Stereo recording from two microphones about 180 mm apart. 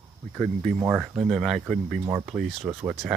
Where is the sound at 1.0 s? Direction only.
Centre (ahead or behind).